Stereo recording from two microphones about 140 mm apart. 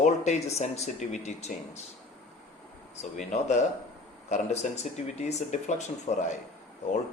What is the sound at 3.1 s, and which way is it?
Speech, 60° left (ahead or behind).